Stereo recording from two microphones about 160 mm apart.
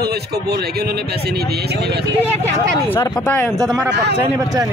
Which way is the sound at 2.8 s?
10° left (ahead or behind).